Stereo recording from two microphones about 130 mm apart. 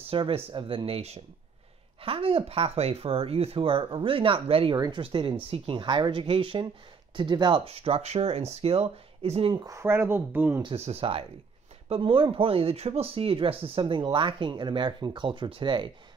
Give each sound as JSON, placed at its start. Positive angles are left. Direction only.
{"t": 0.0, "sound": "speech", "side_deg": -45}
{"t": 4.7, "sound": "speech", "side_deg": -30}
{"t": 5.0, "sound": "speech", "side_deg": -40}
{"t": 9.5, "sound": "speech", "side_deg": -25}
{"t": 10.6, "sound": "speech", "side_deg": -45}